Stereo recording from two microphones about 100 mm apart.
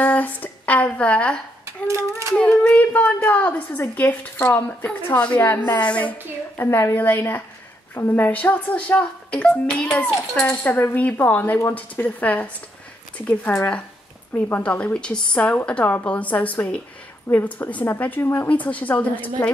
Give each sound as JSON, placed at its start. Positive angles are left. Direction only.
{"t": 0.0, "sound": "speech", "side_deg": 15}
{"t": 2.3, "sound": "a woman's voice", "side_deg": 10}
{"t": 6.6, "sound": "a woman's voice", "side_deg": 25}